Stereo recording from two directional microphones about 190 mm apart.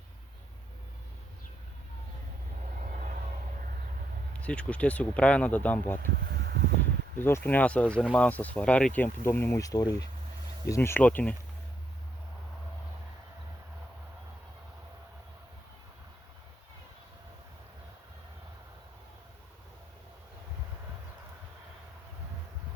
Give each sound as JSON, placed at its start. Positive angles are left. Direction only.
{"t": 2.8, "sound": "vehicle", "side_deg": -40}
{"t": 4.4, "sound": "speech", "side_deg": 5}
{"t": 6.3, "sound": "a sound", "side_deg": -55}
{"t": 7.2, "sound": "speech", "side_deg": 10}